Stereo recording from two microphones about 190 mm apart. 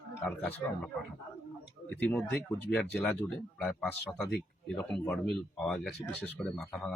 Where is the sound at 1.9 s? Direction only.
10° left (ahead or behind).